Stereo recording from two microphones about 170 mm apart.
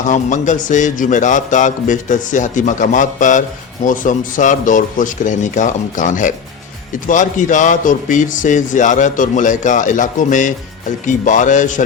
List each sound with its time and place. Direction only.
0.1 s a man's voice: 45° left (ahead or behind)